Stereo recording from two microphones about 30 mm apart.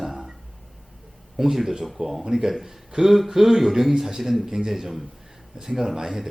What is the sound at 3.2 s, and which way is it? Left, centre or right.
Speech, centre.